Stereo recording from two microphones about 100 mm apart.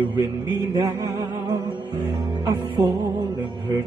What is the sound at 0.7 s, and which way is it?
Music, 35° right (ahead or behind).